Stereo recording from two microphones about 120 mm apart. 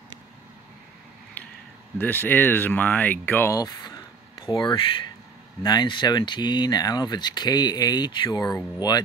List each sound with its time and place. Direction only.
2.0 s speech: 15° left (ahead or behind)
3.5 s speech: 35° left (ahead or behind)